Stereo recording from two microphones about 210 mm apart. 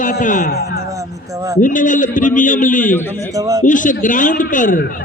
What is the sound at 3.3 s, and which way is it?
Speech, 15° right (ahead or behind).